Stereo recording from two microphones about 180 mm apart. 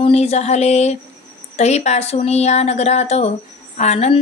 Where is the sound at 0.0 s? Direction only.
35° left (ahead or behind).